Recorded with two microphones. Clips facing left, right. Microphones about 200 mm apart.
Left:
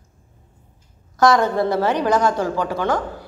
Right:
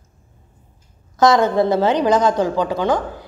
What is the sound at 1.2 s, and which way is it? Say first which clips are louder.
A woman's voice: right 2 dB; 20° right (ahead or behind).